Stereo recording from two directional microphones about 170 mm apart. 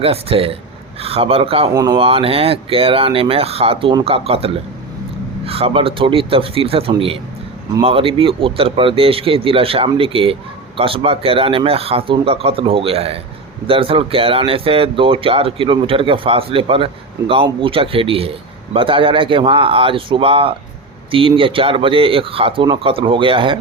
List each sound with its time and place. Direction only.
0.0 s speech: 35° right (ahead or behind)
1.7 s speech: 20° right (ahead or behind)
2.0 s speech: 35° right (ahead or behind)